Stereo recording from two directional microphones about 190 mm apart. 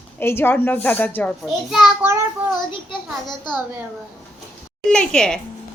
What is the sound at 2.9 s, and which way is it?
Speech, 20° left (ahead or behind).